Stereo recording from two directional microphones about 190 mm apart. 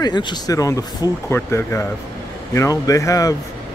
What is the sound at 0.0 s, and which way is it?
Speech, 25° left (ahead or behind).